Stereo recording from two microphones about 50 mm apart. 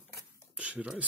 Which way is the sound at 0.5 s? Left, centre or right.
Right.